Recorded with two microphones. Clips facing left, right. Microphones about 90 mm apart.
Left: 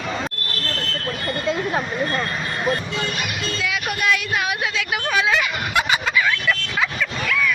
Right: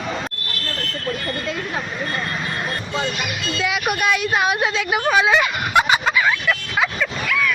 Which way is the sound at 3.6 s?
20° right (ahead or behind).